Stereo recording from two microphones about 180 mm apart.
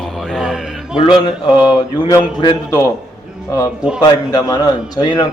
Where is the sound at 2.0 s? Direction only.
25° left (ahead or behind).